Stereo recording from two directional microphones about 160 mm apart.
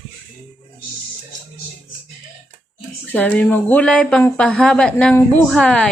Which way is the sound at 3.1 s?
10° left (ahead or behind).